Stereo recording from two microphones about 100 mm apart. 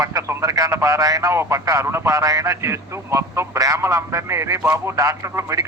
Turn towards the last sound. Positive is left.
turn(degrees=-30)  # may be behind; listen again after turning